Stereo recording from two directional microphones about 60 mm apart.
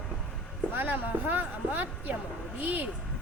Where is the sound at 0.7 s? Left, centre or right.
Right.